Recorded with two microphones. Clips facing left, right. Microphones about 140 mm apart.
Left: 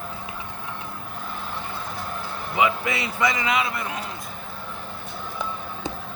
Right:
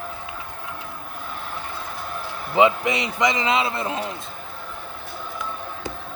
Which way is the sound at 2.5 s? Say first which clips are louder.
Right 5 dB; 25° right (ahead or behind).